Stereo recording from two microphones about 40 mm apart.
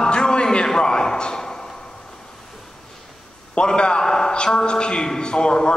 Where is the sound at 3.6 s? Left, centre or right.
Left.